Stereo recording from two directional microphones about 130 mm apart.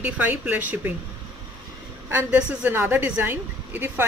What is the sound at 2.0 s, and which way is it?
A woman's voice, 10° right (ahead or behind).